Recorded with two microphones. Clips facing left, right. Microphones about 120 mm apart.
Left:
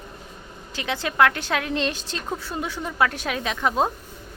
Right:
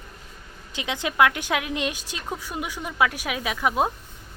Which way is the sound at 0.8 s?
15° right (ahead or behind).